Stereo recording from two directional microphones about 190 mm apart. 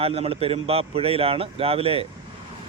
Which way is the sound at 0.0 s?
30° right (ahead or behind).